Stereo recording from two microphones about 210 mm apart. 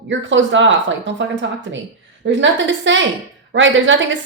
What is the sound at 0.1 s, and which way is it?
A woman's voice, 60° right (ahead or behind).